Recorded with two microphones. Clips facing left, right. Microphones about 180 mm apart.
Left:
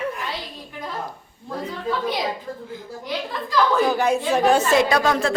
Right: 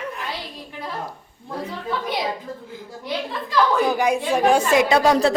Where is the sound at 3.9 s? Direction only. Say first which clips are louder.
Even; 15° right (ahead or behind).